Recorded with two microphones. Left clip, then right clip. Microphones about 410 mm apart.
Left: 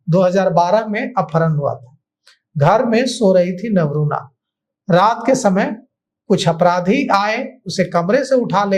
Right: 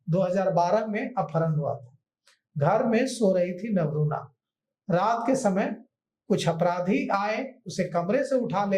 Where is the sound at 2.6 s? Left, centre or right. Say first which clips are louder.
Left 10 dB; left.